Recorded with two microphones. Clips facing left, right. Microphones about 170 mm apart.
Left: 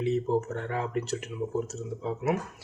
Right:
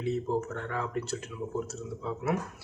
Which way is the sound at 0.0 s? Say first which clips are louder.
Left 3 dB; 15° left (ahead or behind).